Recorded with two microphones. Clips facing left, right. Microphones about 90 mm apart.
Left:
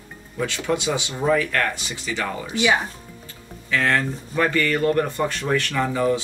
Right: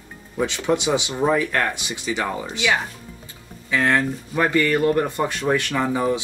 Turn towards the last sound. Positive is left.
turn(degrees=-20)  # may be behind; listen again after turning